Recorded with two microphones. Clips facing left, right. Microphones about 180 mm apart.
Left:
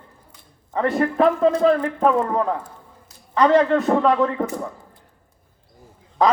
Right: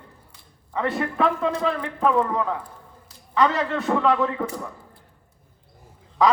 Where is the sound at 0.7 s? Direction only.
40° left (ahead or behind).